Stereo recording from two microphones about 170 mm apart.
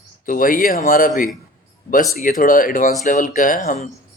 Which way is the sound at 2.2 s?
55° left (ahead or behind).